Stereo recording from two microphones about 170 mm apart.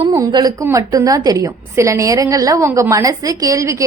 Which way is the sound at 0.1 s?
20° right (ahead or behind).